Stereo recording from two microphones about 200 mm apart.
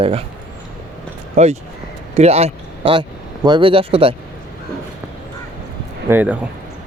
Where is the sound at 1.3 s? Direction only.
35° right (ahead or behind).